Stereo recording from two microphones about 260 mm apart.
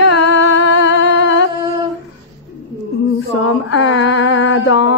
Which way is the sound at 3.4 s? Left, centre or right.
Left.